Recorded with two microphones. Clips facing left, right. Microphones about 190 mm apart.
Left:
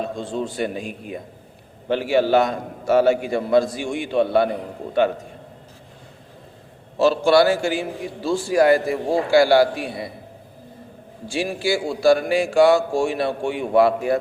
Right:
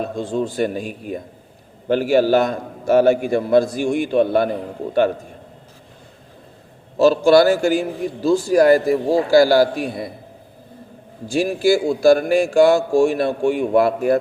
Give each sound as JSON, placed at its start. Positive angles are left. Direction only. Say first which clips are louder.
{"t": 0.0, "sound": "a man's voice", "louder": "right 4 dB", "side_deg": -45}
{"t": 1.9, "sound": "a man's voice", "louder": "right 3 dB", "side_deg": -45}
{"t": 7.0, "sound": "a man's voice", "louder": "right 3 dB", "side_deg": -40}
{"t": 11.3, "sound": "a man's voice", "louder": "right 6 dB", "side_deg": -45}